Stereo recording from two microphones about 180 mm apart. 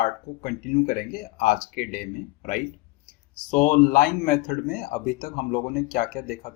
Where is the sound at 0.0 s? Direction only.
45° left (ahead or behind).